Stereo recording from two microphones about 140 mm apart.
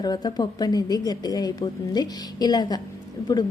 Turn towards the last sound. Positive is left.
turn(degrees=30)  # may be behind; listen again after turning